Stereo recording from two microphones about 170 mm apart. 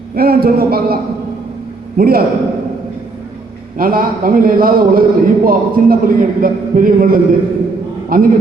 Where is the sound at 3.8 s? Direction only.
55° right (ahead or behind).